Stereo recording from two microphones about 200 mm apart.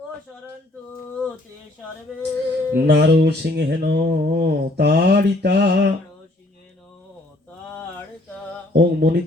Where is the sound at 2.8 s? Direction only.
55° right (ahead or behind).